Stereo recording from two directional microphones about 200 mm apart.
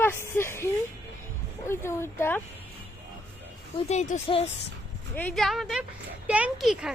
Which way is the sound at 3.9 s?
35° left (ahead or behind).